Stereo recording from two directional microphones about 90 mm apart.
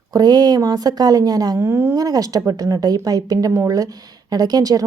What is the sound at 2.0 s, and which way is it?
A woman's voice, 40° right (ahead or behind).